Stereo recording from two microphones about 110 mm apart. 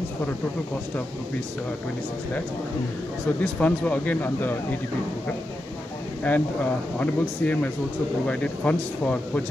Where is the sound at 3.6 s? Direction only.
15° left (ahead or behind).